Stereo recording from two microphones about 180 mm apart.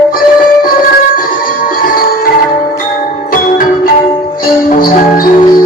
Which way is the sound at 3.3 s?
50° left (ahead or behind).